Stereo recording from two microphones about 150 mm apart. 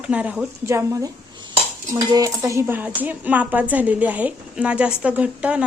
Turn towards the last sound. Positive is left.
turn(degrees=-10)  # may be behind; listen again after turning